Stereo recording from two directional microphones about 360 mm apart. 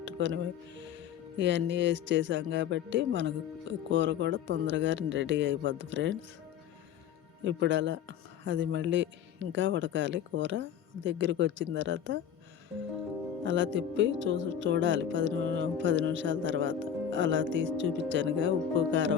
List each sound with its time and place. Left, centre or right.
0.0 s music: right
0.8 s speech: right
7.4 s speech: right
13.4 s speech: right